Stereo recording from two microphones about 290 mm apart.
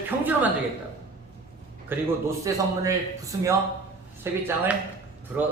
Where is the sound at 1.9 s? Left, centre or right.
Centre.